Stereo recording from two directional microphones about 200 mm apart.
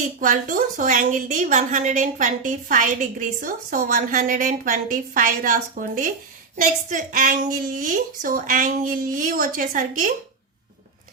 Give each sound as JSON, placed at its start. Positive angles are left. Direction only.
{"t": 0.2, "sound": "a woman's voice", "side_deg": -40}